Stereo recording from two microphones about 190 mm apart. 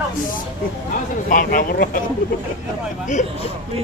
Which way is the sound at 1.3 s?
45° left (ahead or behind).